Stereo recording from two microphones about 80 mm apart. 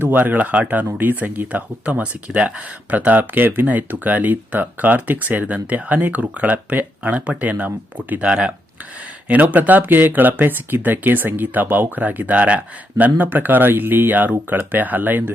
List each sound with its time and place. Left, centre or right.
0.0 s speech: right